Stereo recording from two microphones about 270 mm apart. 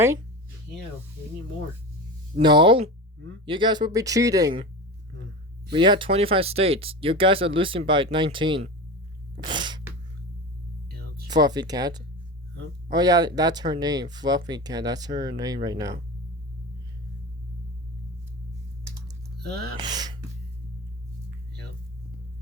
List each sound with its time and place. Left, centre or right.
2.4 s speech: centre
5.7 s speech: centre
9.4 s a sound: centre
10.8 s music: right
11.3 s speech: centre
19.5 s speech: right
19.7 s speech: centre